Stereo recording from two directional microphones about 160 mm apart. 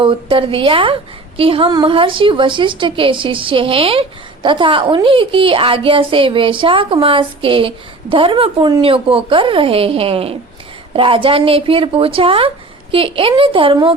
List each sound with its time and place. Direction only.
0.0 s a woman's voice: 35° right (ahead or behind)